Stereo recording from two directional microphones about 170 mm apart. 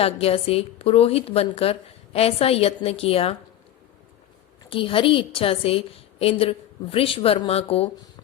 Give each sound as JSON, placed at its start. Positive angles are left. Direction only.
{"t": 0.0, "sound": "a woman's voice", "side_deg": 35}
{"t": 4.7, "sound": "a woman's voice", "side_deg": 30}